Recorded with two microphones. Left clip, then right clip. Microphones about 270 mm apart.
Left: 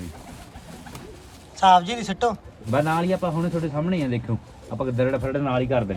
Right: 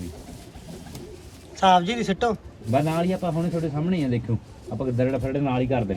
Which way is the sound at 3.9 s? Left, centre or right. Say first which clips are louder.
Even; left.